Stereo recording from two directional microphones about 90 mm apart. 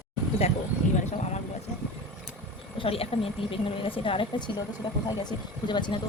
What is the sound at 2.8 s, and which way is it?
Speech, 90° left.